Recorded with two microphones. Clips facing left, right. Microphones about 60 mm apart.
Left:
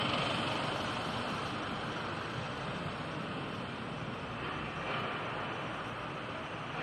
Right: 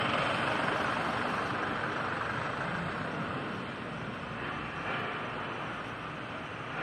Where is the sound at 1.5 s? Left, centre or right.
Right.